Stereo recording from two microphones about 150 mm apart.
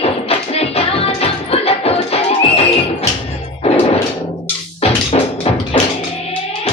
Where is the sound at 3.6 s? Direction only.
45° left (ahead or behind).